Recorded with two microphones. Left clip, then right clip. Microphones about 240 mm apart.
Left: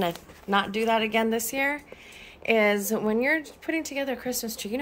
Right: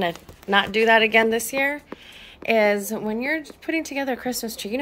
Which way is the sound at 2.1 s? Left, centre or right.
Centre.